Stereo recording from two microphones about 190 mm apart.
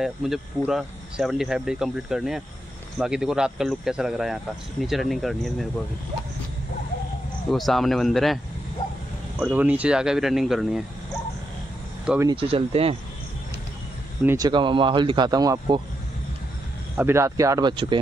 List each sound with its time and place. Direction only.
0.0 s speech: centre (ahead or behind)
7.5 s speech: centre (ahead or behind)
9.4 s speech: 10° right (ahead or behind)
12.2 s speech: 25° right (ahead or behind)
14.2 s speech: 20° right (ahead or behind)
16.9 s speech: 10° right (ahead or behind)